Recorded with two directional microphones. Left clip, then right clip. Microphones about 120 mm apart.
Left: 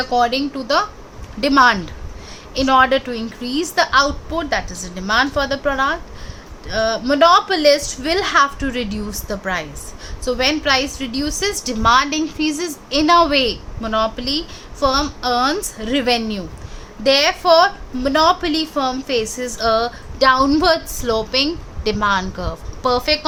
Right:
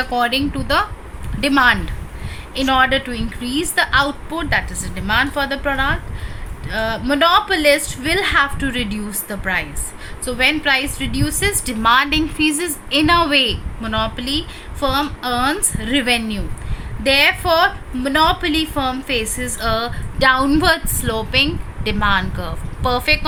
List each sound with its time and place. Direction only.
0.0 s a woman's voice: 40° left (ahead or behind); by 23.2 s 55° left (ahead or behind)